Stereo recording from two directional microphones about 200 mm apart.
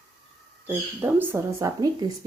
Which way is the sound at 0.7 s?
10° right (ahead or behind).